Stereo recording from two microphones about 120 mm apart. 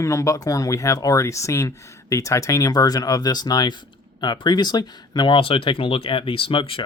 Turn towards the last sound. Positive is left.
turn(degrees=45)  # may be behind; listen again after turning